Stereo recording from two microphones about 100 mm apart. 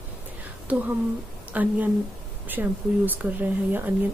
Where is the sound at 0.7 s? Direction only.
15° right (ahead or behind).